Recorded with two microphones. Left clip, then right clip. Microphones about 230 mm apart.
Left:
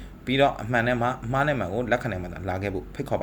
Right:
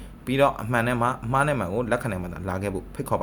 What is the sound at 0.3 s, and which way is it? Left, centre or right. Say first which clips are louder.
Speech: even; centre.